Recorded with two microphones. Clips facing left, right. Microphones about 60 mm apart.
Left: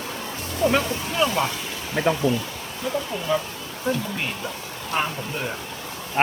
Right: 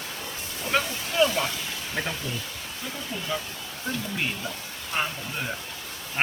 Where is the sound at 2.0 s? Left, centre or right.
Centre.